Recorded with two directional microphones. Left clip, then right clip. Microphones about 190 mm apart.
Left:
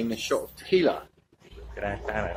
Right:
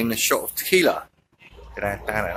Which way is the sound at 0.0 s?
5° right (ahead or behind).